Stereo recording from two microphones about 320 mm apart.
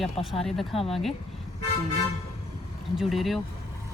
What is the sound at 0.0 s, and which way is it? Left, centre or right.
Speech, centre.